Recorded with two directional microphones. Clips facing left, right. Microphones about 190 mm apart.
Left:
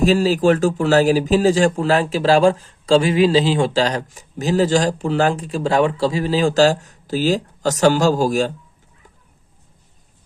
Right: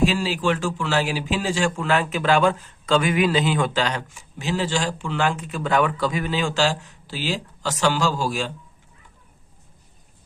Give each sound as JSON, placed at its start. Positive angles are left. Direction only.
{"t": 0.0, "sound": "speech", "side_deg": 40}